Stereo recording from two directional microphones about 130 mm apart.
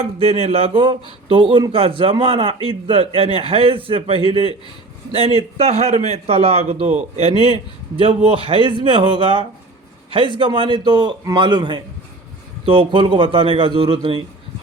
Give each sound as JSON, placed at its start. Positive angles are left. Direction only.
{"t": 0.0, "sound": "a man's voice", "side_deg": -50}